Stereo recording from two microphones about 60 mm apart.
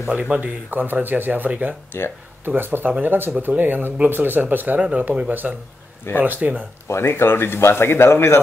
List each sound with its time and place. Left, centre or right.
0.1 s speech: right
4.7 s speech: centre
6.9 s speech: left